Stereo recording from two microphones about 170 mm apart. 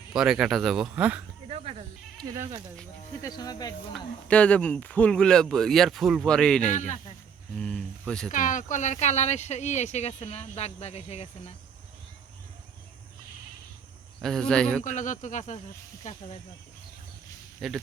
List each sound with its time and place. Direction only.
0.1 s speech: 5° right (ahead or behind)
1.5 s goat: 40° right (ahead or behind)
2.1 s sheep: 20° right (ahead or behind)
2.4 s speech: 35° right (ahead or behind)
3.2 s speech: 20° left (ahead or behind)
4.3 s speech: 5° left (ahead or behind)
6.7 s speech: 45° left (ahead or behind)
7.5 s a sound: 5° left (ahead or behind)
8.3 s speech: 50° left (ahead or behind)
14.2 s speech: 5° left (ahead or behind)
14.8 s speech: 45° left (ahead or behind)
17.6 s speech: centre (ahead or behind)